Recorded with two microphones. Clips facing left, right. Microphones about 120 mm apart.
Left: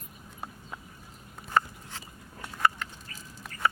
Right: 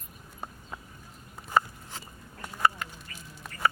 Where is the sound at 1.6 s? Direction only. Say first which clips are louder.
Right 1 dB; 10° right (ahead or behind).